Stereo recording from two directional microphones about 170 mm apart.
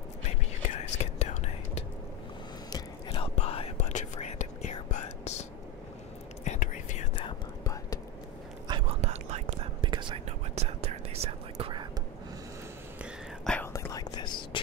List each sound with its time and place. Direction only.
0.7 s whispering: 40° left (ahead or behind)
3.1 s whispering: 35° left (ahead or behind)
7.2 s whispering: 25° left (ahead or behind)
8.6 s whispering: 30° right (ahead or behind)
9.8 s whispering: 30° right (ahead or behind)
13.0 s whispering: 5° left (ahead or behind)
13.7 s whispering: 20° left (ahead or behind)